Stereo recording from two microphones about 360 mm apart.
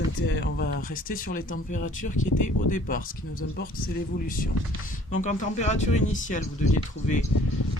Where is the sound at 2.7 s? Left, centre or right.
Left.